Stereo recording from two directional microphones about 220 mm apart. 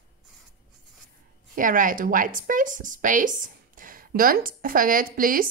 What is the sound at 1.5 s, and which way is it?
Speech, 40° right (ahead or behind).